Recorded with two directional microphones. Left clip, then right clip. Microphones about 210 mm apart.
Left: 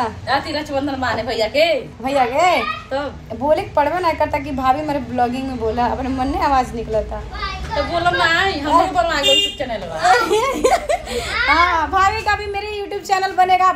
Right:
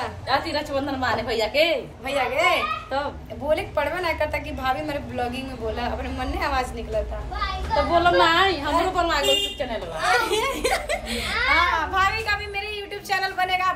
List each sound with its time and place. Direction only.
0.3 s a woman's voice: 20° right (ahead or behind)
2.0 s a woman's voice: 5° left (ahead or behind)
7.9 s a woman's voice: 25° right (ahead or behind)
10.0 s a woman's voice: centre (ahead or behind)